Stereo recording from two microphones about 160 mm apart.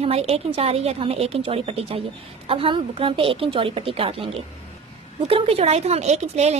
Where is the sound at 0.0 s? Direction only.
40° right (ahead or behind).